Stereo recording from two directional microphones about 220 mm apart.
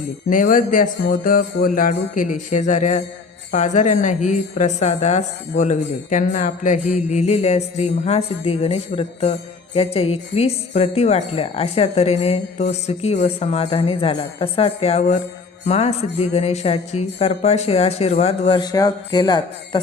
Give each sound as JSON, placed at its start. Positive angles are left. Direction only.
{"t": 0.3, "sound": "speech", "side_deg": 40}